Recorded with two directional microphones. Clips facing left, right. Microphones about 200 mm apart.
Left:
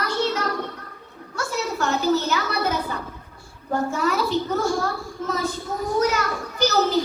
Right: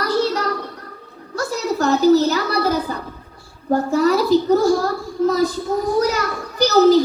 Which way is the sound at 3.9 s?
35° right (ahead or behind).